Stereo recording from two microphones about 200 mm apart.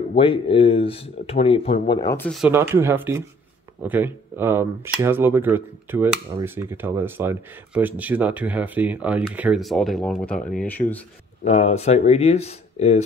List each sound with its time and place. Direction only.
0.1 s speech: 25° left (ahead or behind)
2.3 s speech: 5° right (ahead or behind)
11.4 s speech: 35° left (ahead or behind)